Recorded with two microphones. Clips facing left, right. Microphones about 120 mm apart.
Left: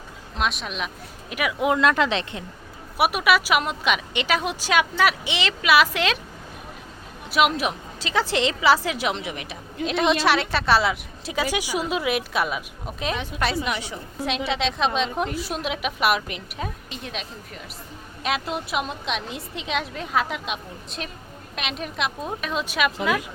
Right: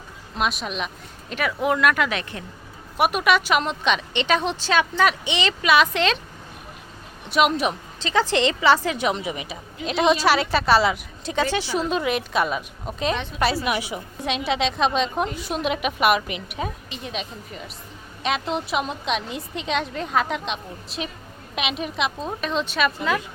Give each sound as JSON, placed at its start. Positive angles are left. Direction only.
{"t": 0.3, "sound": "a woman's voice", "side_deg": 0}
{"t": 1.3, "sound": "speech", "side_deg": 10}
{"t": 3.0, "sound": "a woman's voice", "side_deg": 5}
{"t": 7.3, "sound": "a woman's voice", "side_deg": 0}
{"t": 13.7, "sound": "a woman's voice", "side_deg": -10}
{"t": 14.3, "sound": "a woman's voice", "side_deg": 0}